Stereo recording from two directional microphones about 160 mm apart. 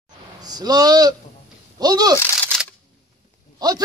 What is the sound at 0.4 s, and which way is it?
A man's voice, 25° right (ahead or behind).